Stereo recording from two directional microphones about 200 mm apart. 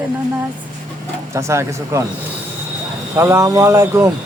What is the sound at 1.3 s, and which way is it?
Speech, 15° right (ahead or behind).